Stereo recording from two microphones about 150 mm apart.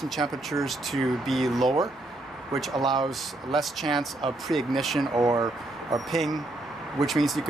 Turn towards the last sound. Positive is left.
turn(degrees=0)  # may be behind; listen again after turning